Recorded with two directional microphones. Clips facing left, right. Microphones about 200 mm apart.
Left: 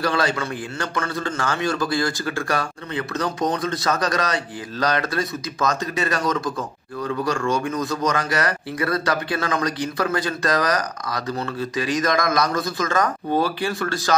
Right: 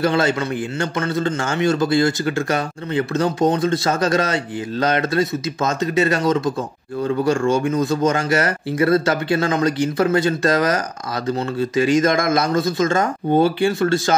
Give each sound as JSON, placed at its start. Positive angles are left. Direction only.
{"t": 0.0, "sound": "a man's voice", "side_deg": -25}